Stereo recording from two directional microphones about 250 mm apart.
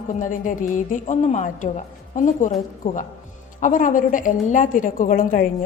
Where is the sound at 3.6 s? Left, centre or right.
Left.